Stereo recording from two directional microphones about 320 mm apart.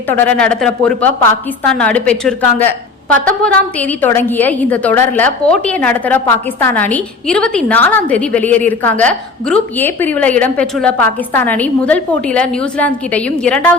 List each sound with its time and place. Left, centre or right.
0.1 s a woman's voice: centre